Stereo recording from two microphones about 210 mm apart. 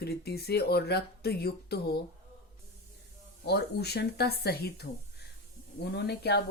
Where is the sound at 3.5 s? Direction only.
50° left (ahead or behind).